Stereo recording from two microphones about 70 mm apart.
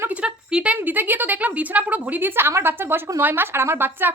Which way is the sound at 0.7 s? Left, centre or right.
Right.